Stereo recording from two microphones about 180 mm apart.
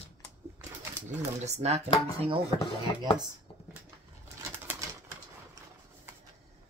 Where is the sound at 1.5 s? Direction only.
35° right (ahead or behind).